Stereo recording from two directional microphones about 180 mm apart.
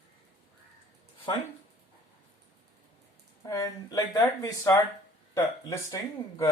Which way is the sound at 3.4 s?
20° left (ahead or behind).